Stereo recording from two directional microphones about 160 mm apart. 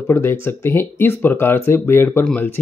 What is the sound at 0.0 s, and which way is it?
Speech, 15° left (ahead or behind).